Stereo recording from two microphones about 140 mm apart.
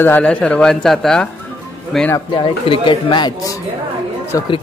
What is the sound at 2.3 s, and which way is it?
Speech, 35° left (ahead or behind).